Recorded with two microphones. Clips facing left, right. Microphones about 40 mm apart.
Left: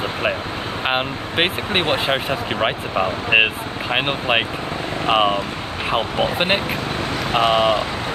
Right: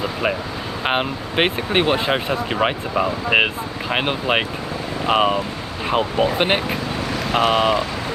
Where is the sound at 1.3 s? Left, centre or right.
Centre.